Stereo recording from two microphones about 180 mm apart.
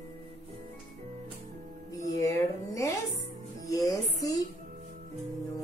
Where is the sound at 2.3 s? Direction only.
15° left (ahead or behind).